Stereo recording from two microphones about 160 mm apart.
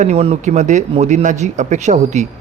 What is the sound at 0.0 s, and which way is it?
A man's voice, 40° right (ahead or behind).